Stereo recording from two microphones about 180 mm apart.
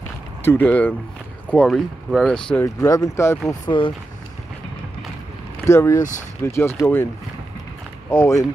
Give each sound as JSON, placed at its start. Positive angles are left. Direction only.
{"t": 0.5, "sound": "speech", "side_deg": 10}
{"t": 2.6, "sound": "speech", "side_deg": 15}
{"t": 5.7, "sound": "speech", "side_deg": 15}
{"t": 8.1, "sound": "speech", "side_deg": 15}